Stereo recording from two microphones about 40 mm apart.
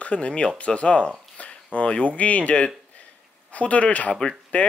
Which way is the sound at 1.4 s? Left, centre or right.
Left.